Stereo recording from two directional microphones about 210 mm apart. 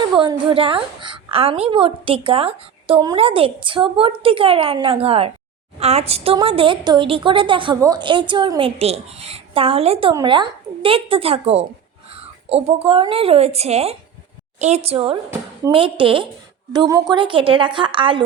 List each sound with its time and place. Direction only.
0.0 s a woman's voice: 20° right (ahead or behind)